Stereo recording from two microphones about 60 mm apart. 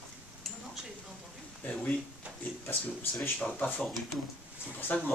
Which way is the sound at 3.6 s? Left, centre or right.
Left.